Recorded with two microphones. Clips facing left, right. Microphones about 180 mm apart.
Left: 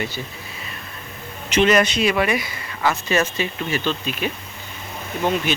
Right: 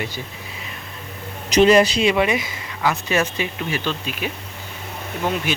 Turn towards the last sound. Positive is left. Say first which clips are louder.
# left 2 dB
turn(degrees=-5)  # may be behind; listen again after turning